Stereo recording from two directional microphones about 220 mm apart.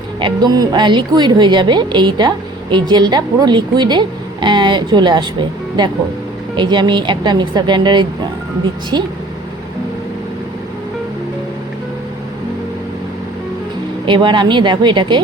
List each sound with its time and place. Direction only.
0.2 s a woman's voice: 20° right (ahead or behind)
14.0 s a woman's voice: 20° right (ahead or behind)